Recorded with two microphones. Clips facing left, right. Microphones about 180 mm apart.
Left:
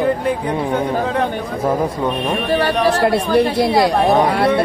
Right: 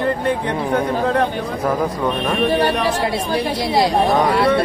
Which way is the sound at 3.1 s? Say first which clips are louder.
Left 6 dB; 55° left (ahead or behind).